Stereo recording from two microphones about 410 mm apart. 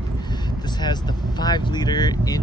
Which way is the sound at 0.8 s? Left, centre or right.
Centre.